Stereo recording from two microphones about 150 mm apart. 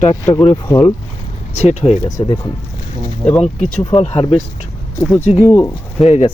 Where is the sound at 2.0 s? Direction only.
25° left (ahead or behind).